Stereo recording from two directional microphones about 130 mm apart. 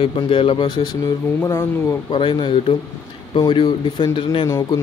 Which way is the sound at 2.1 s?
40° left (ahead or behind).